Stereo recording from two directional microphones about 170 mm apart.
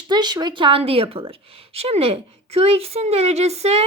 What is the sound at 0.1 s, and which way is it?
Speech, 25° right (ahead or behind).